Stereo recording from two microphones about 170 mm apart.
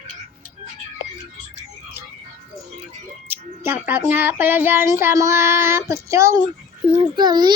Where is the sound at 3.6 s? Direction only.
15° right (ahead or behind).